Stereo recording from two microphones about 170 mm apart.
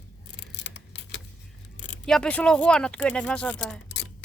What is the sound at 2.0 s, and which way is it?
Speech, 5° left (ahead or behind).